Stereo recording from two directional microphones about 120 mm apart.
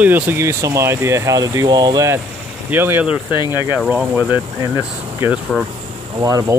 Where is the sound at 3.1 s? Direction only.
40° left (ahead or behind).